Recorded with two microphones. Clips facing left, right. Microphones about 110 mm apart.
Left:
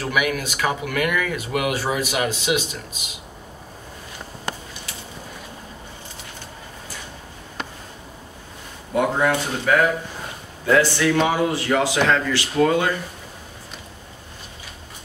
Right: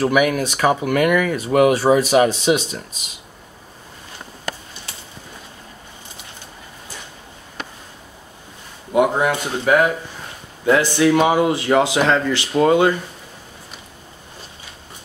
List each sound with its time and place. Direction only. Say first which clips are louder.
0.0 s speech: right 6 dB; 35° right (ahead or behind)
8.9 s speech: right 3 dB; 20° right (ahead or behind)